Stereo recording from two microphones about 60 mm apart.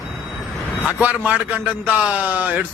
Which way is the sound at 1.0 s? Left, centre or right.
Right.